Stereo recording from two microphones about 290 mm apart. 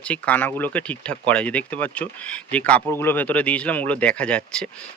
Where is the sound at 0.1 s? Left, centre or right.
Centre.